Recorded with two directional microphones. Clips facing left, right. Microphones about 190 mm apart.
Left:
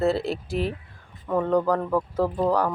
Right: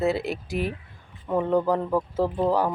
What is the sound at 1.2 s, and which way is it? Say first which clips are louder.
Speech: even; 10° right (ahead or behind).